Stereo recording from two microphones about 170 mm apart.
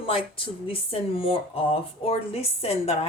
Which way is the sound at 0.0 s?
30° left (ahead or behind).